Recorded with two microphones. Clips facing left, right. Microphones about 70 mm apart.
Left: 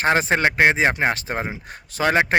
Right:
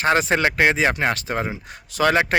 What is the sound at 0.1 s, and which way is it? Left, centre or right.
Speech, left.